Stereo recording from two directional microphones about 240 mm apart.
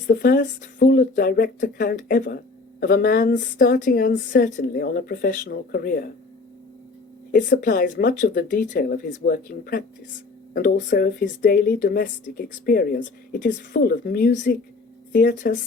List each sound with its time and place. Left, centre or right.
0.1 s speech: left
7.3 s speech: left